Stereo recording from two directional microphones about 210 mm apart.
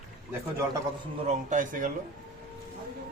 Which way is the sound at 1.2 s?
40° right (ahead or behind).